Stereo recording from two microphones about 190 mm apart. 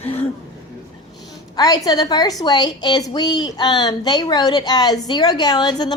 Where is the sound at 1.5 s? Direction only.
20° left (ahead or behind).